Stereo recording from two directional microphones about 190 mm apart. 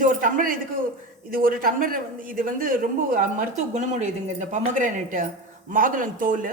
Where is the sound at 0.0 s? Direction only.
45° right (ahead or behind).